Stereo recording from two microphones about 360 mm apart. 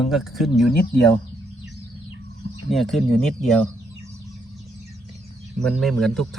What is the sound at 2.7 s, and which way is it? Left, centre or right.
A man's voice, centre.